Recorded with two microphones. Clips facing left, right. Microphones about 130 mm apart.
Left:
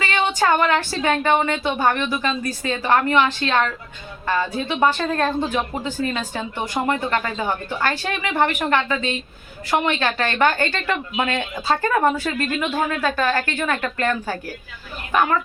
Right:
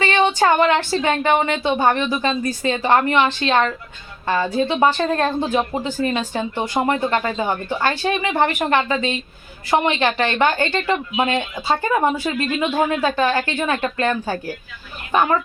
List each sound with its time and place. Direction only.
0.0 s speech: 30° right (ahead or behind)